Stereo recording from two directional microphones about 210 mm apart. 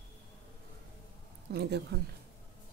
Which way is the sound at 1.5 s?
50° right (ahead or behind).